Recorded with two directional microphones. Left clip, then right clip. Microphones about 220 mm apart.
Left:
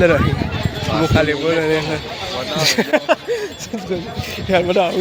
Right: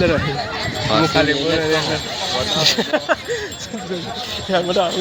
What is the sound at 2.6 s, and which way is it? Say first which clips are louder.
Speech: left 3 dB; 30° left (ahead or behind).